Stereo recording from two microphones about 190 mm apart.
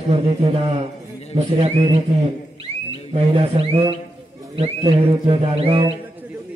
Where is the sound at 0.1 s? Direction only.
30° right (ahead or behind).